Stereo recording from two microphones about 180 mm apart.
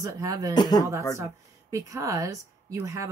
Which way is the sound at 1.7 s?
20° right (ahead or behind).